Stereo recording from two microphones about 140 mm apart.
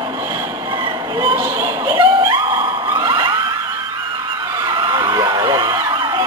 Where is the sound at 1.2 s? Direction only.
20° right (ahead or behind).